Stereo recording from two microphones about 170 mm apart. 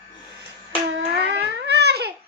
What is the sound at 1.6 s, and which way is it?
Babbling, 75° right (ahead or behind).